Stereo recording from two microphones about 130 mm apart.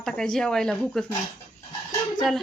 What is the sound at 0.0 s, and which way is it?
Speech, 5° left (ahead or behind).